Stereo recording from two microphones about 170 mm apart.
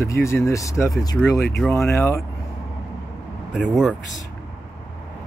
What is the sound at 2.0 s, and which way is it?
Speech, 15° left (ahead or behind).